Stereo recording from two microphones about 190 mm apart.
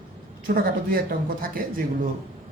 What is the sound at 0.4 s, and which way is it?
Speech, 50° right (ahead or behind).